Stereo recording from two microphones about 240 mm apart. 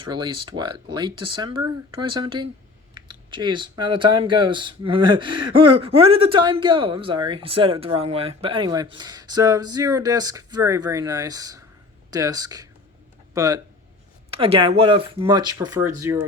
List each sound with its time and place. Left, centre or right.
0.0 s speech: centre